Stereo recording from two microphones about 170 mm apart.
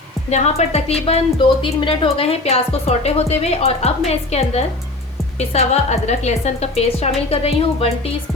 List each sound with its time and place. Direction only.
0.3 s a woman's voice: 40° left (ahead or behind)